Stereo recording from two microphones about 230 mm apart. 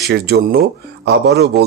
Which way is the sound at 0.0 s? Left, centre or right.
Right.